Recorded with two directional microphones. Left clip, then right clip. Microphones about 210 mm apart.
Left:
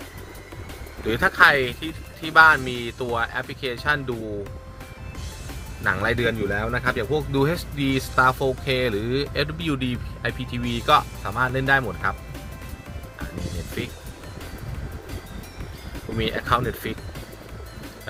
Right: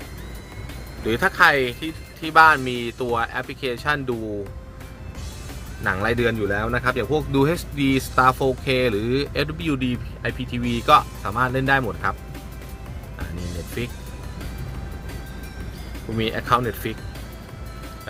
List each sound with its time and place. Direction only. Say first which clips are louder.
1.0 s speech: even; 20° right (ahead or behind)
5.8 s speech: right 1 dB; 15° right (ahead or behind)
13.8 s speech: right 1 dB; 20° right (ahead or behind)
16.1 s speech: right 2 dB; 20° right (ahead or behind)